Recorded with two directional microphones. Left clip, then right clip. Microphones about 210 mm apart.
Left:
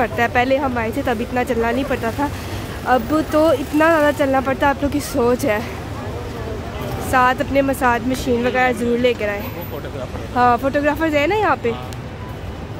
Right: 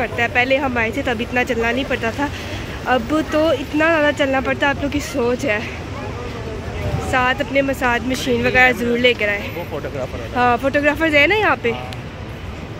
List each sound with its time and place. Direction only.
0.0 s speech: 15° left (ahead or behind)
0.6 s speech: 5° left (ahead or behind)
7.1 s speech: 10° left (ahead or behind)